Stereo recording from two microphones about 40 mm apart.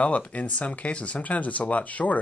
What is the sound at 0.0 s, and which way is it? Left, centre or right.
Speech, left.